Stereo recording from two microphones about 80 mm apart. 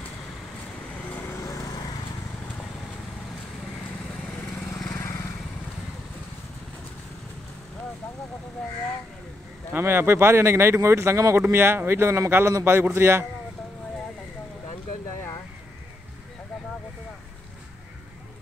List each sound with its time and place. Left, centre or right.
1.1 s lawn mower: left
1.4 s lawn mower: left
4.9 s vehicle: left
9.7 s a man's voice: right